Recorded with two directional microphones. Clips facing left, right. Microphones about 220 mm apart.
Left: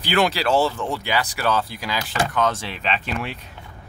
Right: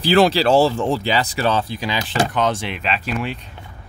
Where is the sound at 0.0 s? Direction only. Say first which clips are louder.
Right 6 dB; 30° right (ahead or behind).